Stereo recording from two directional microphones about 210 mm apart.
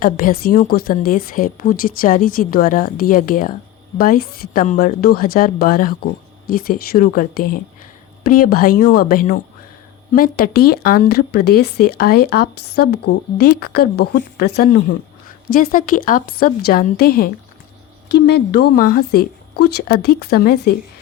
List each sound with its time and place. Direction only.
0.0 s speech: 45° left (ahead or behind)